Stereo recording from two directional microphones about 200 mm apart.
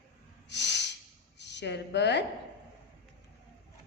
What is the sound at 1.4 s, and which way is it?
Speech, 60° left (ahead or behind).